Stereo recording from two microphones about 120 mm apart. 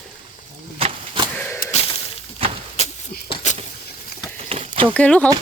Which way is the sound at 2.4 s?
50° right (ahead or behind).